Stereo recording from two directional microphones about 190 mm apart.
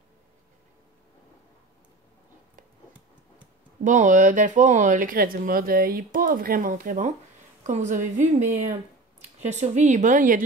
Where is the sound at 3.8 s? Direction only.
40° right (ahead or behind).